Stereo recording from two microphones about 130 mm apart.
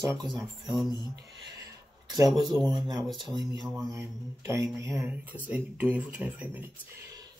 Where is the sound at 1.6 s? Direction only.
25° right (ahead or behind).